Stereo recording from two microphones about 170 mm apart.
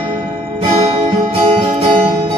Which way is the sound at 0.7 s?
35° right (ahead or behind).